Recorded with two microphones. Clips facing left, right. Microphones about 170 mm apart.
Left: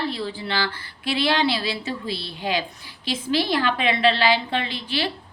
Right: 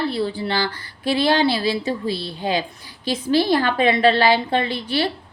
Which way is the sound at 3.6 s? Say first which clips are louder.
Right 4 dB; 40° right (ahead or behind).